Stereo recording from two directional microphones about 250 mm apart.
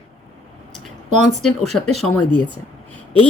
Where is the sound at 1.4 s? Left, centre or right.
Centre.